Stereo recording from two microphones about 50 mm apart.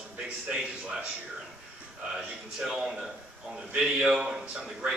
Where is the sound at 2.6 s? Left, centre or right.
Centre.